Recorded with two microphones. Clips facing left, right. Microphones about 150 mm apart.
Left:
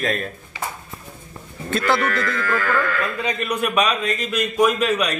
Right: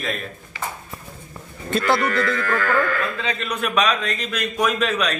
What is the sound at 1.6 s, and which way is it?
Speech, centre (ahead or behind).